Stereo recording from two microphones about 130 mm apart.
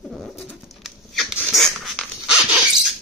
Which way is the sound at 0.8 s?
Centre (ahead or behind).